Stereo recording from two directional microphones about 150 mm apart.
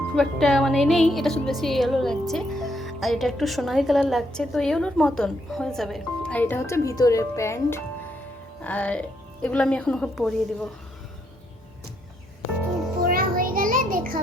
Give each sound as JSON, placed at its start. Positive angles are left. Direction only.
{"t": 0.2, "sound": "speech", "side_deg": 0}
{"t": 13.0, "sound": "music", "side_deg": -70}